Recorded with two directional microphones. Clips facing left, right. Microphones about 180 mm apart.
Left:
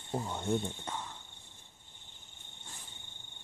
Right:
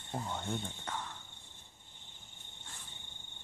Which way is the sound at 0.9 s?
15° left (ahead or behind).